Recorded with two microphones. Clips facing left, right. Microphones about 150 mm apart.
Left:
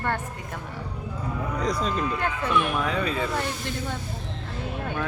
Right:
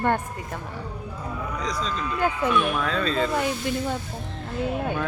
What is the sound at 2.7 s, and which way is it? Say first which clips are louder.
Speech: right 1 dB; 15° left (ahead or behind).